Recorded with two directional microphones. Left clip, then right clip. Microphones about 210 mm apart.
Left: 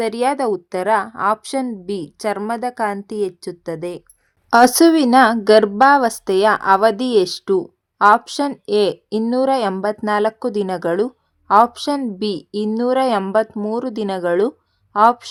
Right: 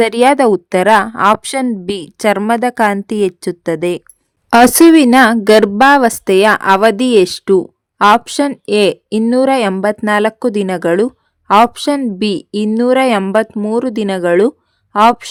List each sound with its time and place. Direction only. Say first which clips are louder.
0.3 s a woman's voice: right 9 dB; 90° right
0.9 s speech: right 7 dB; 45° right (ahead or behind)
3.4 s a woman's voice: right 9 dB; 90° right
4.4 s a woman's voice: right 5 dB; 40° right (ahead or behind)